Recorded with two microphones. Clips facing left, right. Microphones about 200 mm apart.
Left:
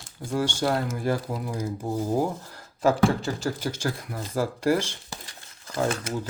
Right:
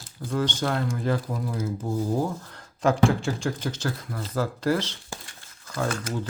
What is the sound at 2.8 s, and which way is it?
Speech, centre (ahead or behind).